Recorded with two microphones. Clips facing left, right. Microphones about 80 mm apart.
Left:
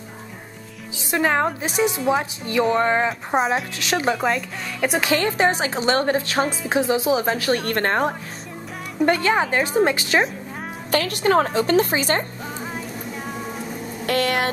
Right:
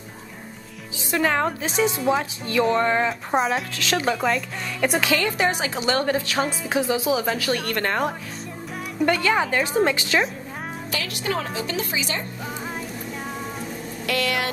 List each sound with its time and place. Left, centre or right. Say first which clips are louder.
1.1 s speech: left 2 dB; left
1.7 s speech: even; centre
2.7 s speech: left 2 dB; centre
3.1 s speech: left 1 dB; centre
3.7 s speech: left 1 dB; left
4.1 s speech: left 1 dB; centre
5.0 s a woman's voice: left 2 dB; left
10.9 s a woman's voice: left 9 dB; left
13.4 s music: left 1 dB; centre
14.0 s a woman's voice: left 4 dB; left